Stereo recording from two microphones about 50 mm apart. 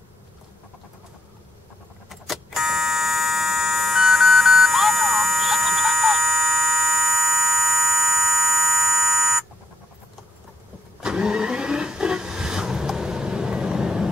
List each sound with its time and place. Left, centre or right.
2.0 s fire alarm: centre
11.0 s vehicle: centre